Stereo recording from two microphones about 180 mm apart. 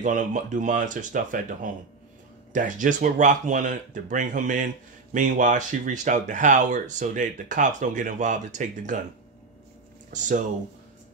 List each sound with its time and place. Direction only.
0.0 s speech: 45° right (ahead or behind)
10.1 s speech: 45° right (ahead or behind)